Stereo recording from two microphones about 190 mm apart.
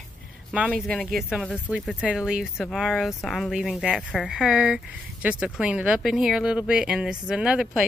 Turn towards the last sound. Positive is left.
turn(degrees=-5)  # may be behind; listen again after turning